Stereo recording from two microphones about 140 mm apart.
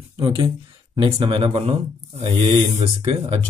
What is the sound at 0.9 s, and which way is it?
Speech, 35° right (ahead or behind).